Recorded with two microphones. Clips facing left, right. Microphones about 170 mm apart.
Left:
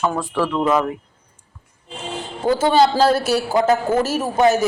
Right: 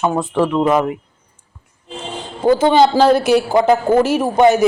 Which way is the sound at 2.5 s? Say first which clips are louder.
Right 4 dB; 15° right (ahead or behind).